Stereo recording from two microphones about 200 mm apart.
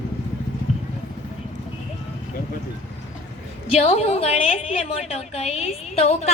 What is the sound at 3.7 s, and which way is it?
A woman's voice, 30° left (ahead or behind).